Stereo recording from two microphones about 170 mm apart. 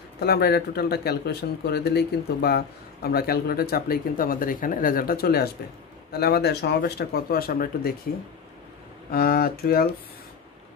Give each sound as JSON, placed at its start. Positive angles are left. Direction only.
{"t": 0.2, "sound": "speech", "side_deg": 70}
{"t": 9.1, "sound": "speech", "side_deg": 60}